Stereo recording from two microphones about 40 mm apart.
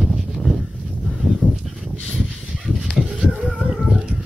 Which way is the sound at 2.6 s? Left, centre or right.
Centre.